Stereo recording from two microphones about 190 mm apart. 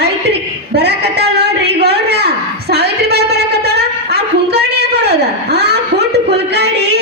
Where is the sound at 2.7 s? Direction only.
60° right (ahead or behind).